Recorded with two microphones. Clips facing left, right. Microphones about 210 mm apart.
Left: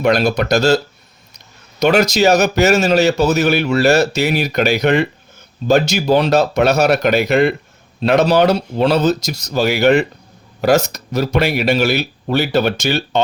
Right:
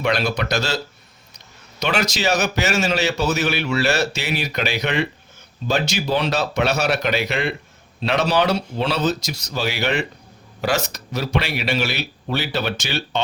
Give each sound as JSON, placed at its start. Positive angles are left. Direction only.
{"t": 0.0, "sound": "a man's voice", "side_deg": 45}
{"t": 1.8, "sound": "a man's voice", "side_deg": 45}